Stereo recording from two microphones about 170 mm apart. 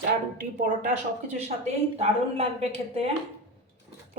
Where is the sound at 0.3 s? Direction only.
50° right (ahead or behind).